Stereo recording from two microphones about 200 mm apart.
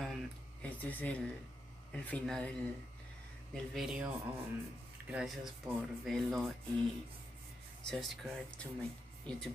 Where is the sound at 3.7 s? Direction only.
5° right (ahead or behind).